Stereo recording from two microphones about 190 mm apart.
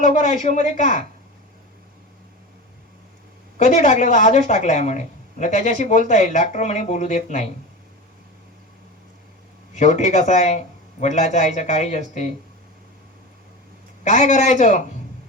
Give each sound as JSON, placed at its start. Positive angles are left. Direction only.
{"t": 0.0, "sound": "a woman's voice", "side_deg": 40}
{"t": 3.6, "sound": "a woman's voice", "side_deg": 40}
{"t": 9.7, "sound": "a woman's voice", "side_deg": 40}
{"t": 14.0, "sound": "a woman's voice", "side_deg": 40}